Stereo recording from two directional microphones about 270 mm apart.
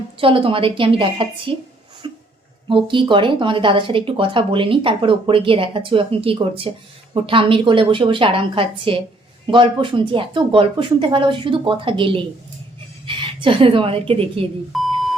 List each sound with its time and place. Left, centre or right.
0.2 s speech: centre
14.7 s beep: centre